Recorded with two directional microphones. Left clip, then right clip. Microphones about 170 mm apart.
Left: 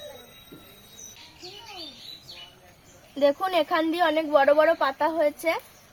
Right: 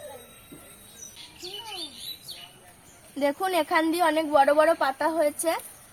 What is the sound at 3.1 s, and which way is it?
A woman's voice, 15° left (ahead or behind).